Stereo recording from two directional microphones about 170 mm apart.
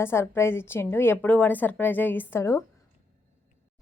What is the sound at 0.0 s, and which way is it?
A woman's voice, 15° left (ahead or behind).